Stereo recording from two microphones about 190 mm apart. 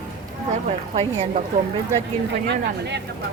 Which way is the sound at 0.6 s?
35° right (ahead or behind).